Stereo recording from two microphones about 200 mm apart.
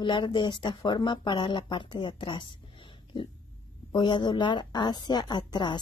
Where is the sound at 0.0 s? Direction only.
25° left (ahead or behind).